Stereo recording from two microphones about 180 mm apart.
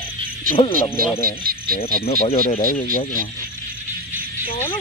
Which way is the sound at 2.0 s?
35° left (ahead or behind).